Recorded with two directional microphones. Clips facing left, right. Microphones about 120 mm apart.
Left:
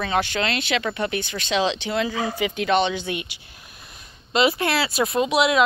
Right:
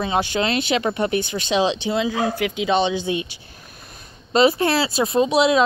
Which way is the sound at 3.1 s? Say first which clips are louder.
Right 5 dB; 25° right (ahead or behind).